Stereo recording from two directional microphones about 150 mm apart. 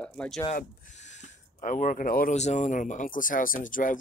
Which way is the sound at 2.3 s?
50° left (ahead or behind).